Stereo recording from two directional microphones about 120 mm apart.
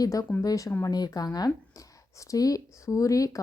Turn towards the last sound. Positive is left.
turn(degrees=30)  # may be behind; listen again after turning